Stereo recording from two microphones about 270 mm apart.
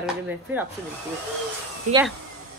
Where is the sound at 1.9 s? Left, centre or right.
Right.